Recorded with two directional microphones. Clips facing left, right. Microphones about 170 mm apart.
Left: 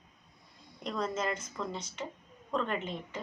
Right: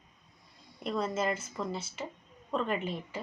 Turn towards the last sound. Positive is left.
turn(degrees=-5)  # may be behind; listen again after turning